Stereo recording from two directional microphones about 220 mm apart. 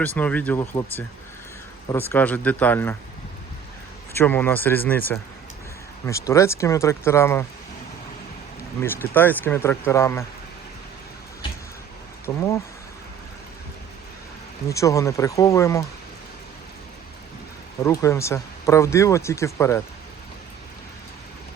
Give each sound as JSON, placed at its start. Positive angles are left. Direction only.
{"t": 0.0, "sound": "speech", "side_deg": 5}
{"t": 4.1, "sound": "speech", "side_deg": 10}
{"t": 8.8, "sound": "speech", "side_deg": 10}
{"t": 12.2, "sound": "speech", "side_deg": 15}
{"t": 14.7, "sound": "speech", "side_deg": 15}
{"t": 17.8, "sound": "speech", "side_deg": 15}